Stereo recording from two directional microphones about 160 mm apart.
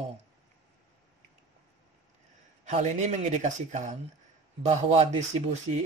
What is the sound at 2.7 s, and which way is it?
Speech, 45° right (ahead or behind).